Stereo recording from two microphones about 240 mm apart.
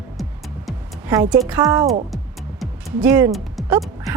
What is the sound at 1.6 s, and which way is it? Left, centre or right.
Speech, centre.